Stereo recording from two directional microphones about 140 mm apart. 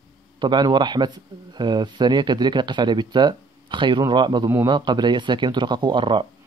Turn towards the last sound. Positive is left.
turn(degrees=-35)  # may be behind; listen again after turning